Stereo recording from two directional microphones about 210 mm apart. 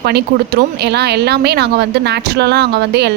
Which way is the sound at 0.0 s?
50° right (ahead or behind).